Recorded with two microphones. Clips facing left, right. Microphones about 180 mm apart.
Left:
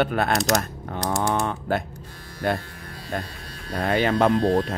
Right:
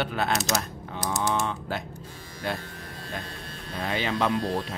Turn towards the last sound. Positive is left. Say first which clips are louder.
# left 7 dB
turn(degrees=60)  # may be behind; listen again after turning